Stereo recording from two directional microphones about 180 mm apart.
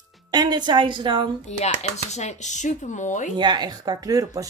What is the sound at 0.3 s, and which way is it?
Speech, 20° right (ahead or behind).